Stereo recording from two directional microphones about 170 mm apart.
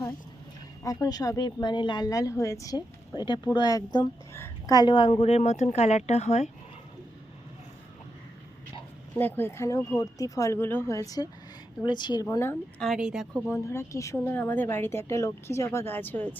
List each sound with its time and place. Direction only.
0.9 s a woman's voice: 20° left (ahead or behind); by 6.5 s 40° left (ahead or behind)
9.1 s a woman's voice: 10° left (ahead or behind)
12.8 s a woman's voice: 5° right (ahead or behind)
13.5 s a woman's voice: 15° left (ahead or behind)